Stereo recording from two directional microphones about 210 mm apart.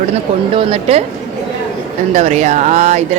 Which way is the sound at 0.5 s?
25° right (ahead or behind).